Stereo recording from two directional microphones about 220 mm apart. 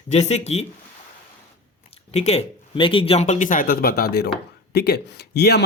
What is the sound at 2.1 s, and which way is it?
A man's voice, 30° left (ahead or behind).